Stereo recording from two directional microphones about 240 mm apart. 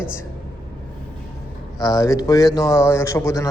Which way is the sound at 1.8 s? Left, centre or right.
Centre.